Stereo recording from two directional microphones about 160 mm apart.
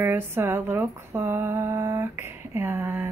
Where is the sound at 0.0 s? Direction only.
15° right (ahead or behind).